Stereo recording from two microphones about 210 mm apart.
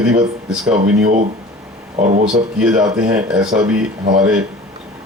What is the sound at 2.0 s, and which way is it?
Speech, 35° right (ahead or behind).